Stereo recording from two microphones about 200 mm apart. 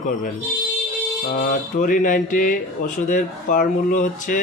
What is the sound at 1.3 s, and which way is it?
Speech, 40° left (ahead or behind).